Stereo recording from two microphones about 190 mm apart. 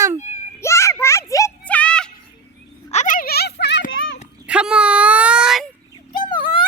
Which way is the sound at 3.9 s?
90° left.